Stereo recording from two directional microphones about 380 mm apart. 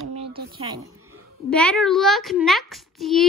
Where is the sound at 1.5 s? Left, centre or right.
Centre.